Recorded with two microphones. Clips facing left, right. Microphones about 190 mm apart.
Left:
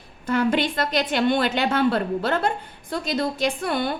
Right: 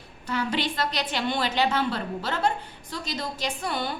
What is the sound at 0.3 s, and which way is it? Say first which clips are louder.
A woman's voice: left 6 dB; 50° left (ahead or behind).